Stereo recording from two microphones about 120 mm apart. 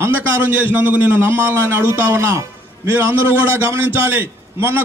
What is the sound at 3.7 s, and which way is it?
A man's voice, 20° right (ahead or behind).